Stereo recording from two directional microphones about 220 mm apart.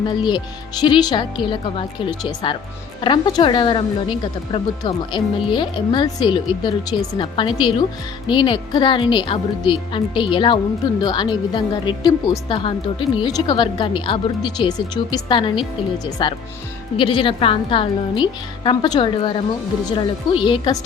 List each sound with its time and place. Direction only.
0.2 s speech: 20° left (ahead or behind)